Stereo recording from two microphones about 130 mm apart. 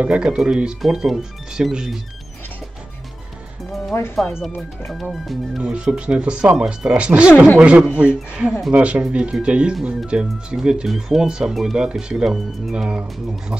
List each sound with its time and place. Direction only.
0.0 s speech: 10° right (ahead or behind)
3.9 s speech: 20° left (ahead or behind)
4.6 s speech: centre (ahead or behind)